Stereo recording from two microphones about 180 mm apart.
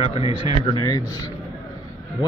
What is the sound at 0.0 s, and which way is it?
Speech, 35° left (ahead or behind).